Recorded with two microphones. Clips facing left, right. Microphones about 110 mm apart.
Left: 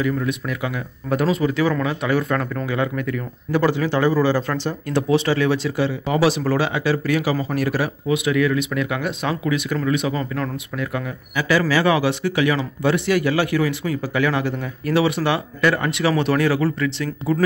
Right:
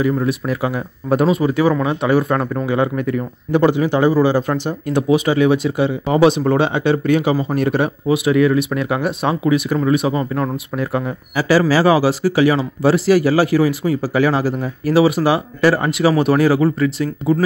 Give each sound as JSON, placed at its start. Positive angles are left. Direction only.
{"t": 0.0, "sound": "speech", "side_deg": -30}